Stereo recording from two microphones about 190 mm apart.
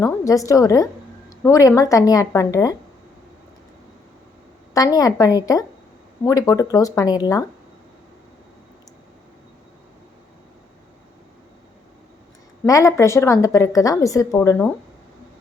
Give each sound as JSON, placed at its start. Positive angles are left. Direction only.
{"t": 0.0, "sound": "a woman's voice", "side_deg": 15}
{"t": 4.7, "sound": "a woman's voice", "side_deg": 20}
{"t": 12.6, "sound": "a woman's voice", "side_deg": 15}